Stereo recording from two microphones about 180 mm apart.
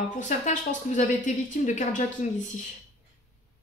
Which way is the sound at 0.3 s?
45° left (ahead or behind).